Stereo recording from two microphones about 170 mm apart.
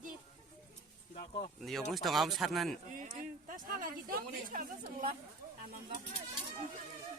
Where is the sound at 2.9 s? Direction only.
50° right (ahead or behind).